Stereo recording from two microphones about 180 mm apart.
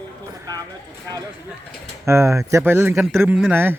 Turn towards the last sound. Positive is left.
turn(degrees=-10)  # may be behind; listen again after turning